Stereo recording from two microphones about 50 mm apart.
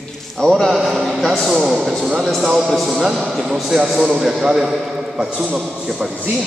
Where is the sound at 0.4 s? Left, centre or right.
Centre.